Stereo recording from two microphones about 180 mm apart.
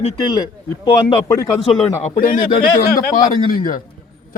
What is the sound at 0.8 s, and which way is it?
Speech, 25° left (ahead or behind).